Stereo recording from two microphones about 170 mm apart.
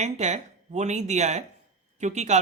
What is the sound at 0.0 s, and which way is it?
Speech, 45° right (ahead or behind).